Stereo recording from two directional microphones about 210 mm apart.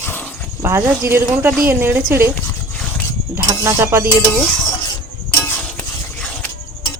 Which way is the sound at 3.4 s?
10° right (ahead or behind).